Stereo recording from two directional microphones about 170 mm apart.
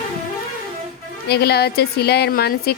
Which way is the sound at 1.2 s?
70° left (ahead or behind).